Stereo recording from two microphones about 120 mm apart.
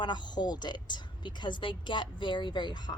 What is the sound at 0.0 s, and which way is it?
Speech, 40° left (ahead or behind).